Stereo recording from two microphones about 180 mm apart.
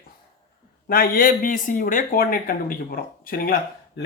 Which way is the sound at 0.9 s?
55° left (ahead or behind).